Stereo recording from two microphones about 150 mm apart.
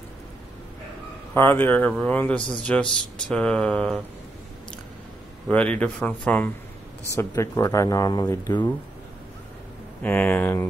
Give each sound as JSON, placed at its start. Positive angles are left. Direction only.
{"t": 1.3, "sound": "speech", "side_deg": 15}
{"t": 5.5, "sound": "speech", "side_deg": 10}
{"t": 7.2, "sound": "speech", "side_deg": 20}
{"t": 10.0, "sound": "speech", "side_deg": 10}